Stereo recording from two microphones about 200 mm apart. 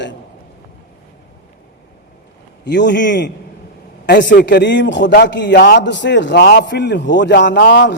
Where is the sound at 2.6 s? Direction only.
60° left (ahead or behind).